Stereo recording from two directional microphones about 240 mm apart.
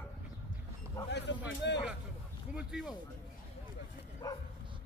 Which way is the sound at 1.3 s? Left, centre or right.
Left.